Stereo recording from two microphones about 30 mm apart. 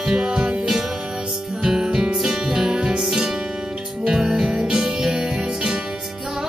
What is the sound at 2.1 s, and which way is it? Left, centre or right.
Music, centre.